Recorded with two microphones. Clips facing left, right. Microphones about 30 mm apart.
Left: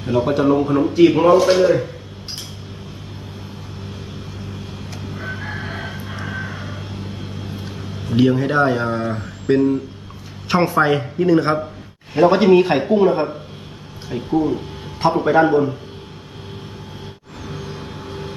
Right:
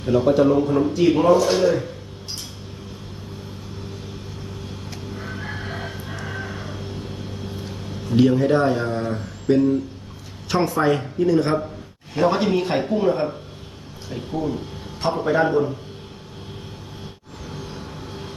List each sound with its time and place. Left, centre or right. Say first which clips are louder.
0.0 s speech: even; centre
5.1 s chicken: left 4 dB; left
8.1 s speech: left 1 dB; centre
17.5 s vehicle: left 3 dB; left